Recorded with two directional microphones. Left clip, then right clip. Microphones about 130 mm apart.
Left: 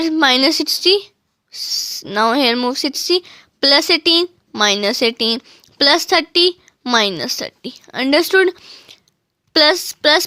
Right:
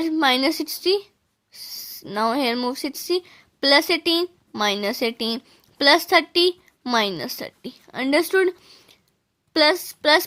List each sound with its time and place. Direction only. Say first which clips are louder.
0.0 s speech: left 6 dB; 25° left (ahead or behind)